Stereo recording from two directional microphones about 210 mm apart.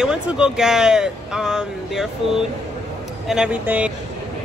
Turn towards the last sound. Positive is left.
turn(degrees=-5)  # may be behind; listen again after turning